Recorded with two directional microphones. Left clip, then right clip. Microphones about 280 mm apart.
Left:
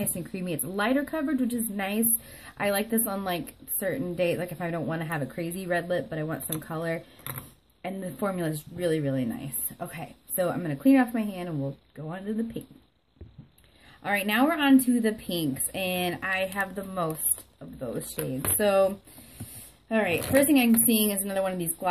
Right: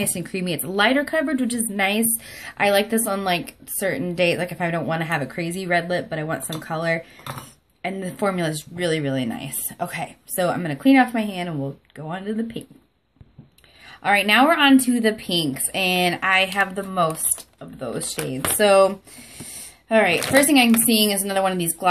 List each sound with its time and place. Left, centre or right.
0.0 s a woman's voice: centre
14.0 s a woman's voice: centre